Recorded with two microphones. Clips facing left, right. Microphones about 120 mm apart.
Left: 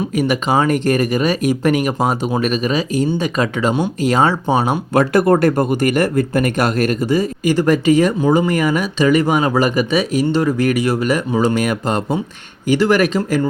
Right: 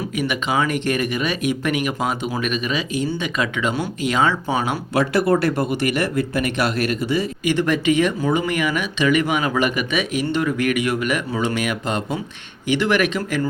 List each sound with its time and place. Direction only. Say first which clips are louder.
0.2 s speech: left 5 dB; 40° left (ahead or behind)
4.9 s speech: left 5 dB; 45° left (ahead or behind)